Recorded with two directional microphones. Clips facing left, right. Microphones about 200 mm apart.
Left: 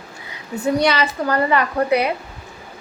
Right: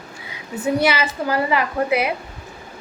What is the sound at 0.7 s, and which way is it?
A woman's voice, 5° right (ahead or behind).